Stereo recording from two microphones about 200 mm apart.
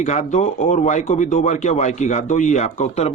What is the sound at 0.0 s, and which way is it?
Speech, 35° left (ahead or behind).